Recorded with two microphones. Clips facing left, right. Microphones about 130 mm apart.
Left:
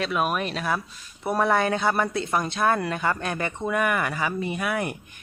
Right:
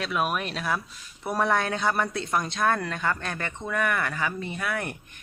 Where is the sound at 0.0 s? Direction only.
Centre (ahead or behind).